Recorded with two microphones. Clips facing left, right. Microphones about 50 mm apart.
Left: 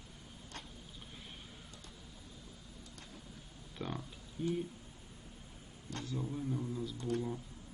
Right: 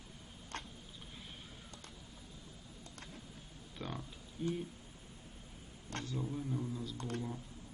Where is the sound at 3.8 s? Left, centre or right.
Centre.